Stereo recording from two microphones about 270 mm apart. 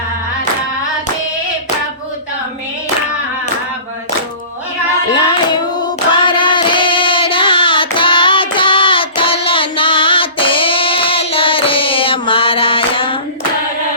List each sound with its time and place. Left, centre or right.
5.1 s singing: centre